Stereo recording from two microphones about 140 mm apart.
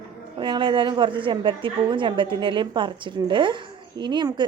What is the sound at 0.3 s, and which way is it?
A woman's voice, 35° right (ahead or behind).